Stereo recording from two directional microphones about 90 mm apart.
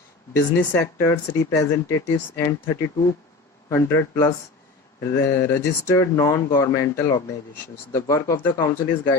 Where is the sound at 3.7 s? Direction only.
30° left (ahead or behind).